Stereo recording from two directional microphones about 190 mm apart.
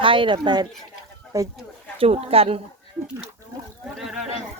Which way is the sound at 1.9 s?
30° right (ahead or behind).